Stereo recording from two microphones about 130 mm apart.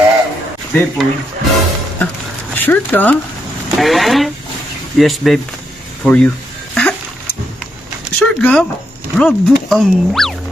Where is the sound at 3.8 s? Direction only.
Centre (ahead or behind).